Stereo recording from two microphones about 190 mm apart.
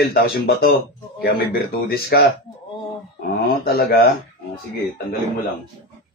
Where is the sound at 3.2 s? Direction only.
50° left (ahead or behind).